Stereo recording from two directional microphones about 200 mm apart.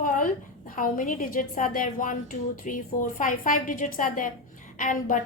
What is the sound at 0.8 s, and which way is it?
A woman's voice, 40° left (ahead or behind).